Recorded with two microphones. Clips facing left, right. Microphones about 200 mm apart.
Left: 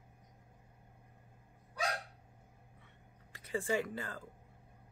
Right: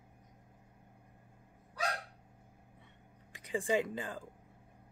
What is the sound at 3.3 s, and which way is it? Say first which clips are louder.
Speech: right 2 dB; 15° right (ahead or behind).